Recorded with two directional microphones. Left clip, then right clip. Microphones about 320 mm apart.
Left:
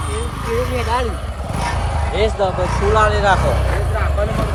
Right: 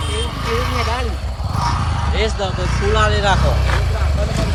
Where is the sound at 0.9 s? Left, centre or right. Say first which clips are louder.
Left 4 dB; centre.